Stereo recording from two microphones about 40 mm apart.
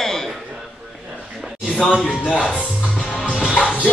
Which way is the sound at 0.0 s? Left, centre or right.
Centre.